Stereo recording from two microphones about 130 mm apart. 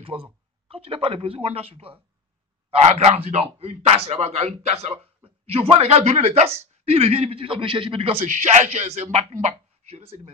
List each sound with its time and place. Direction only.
0.1 s speech: 5° right (ahead or behind)
0.7 s a man's voice: 45° right (ahead or behind)
8.3 s speech: 65° right (ahead or behind)